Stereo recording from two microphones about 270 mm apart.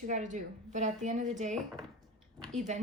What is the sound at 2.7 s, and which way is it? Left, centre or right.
Speech, right.